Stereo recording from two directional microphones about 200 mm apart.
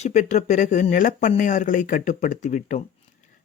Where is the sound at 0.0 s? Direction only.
35° left (ahead or behind).